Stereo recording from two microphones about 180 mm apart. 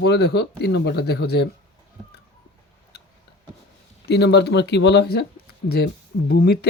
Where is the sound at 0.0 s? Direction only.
65° left (ahead or behind).